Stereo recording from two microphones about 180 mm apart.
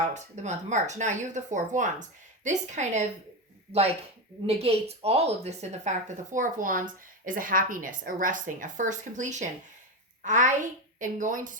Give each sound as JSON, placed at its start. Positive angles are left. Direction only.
{"t": 0.0, "sound": "speech", "side_deg": -40}
{"t": 4.4, "sound": "speech", "side_deg": -35}